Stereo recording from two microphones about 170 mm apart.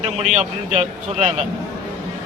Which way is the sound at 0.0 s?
40° right (ahead or behind).